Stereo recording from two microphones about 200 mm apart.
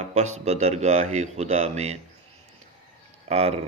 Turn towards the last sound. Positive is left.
turn(degrees=-30)  # may be behind; listen again after turning